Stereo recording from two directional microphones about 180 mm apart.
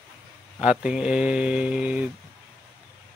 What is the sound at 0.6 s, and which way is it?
Mantra, 5° right (ahead or behind).